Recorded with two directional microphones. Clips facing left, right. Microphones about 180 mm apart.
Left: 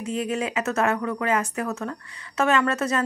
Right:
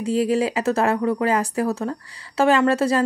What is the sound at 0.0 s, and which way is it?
A woman's voice, 30° right (ahead or behind).